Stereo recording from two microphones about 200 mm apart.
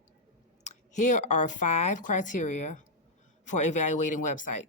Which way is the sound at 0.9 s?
35° left (ahead or behind).